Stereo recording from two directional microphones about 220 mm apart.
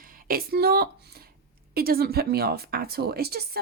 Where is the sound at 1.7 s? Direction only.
45° right (ahead or behind).